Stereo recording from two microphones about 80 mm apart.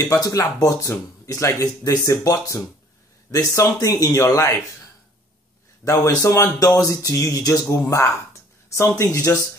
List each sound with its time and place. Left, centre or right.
0.1 s speech: left
5.9 s speech: left